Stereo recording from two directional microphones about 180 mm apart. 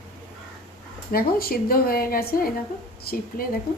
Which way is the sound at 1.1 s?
55° left (ahead or behind).